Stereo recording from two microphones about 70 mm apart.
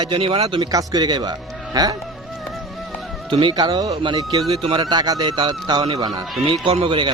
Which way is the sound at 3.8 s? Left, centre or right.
Right.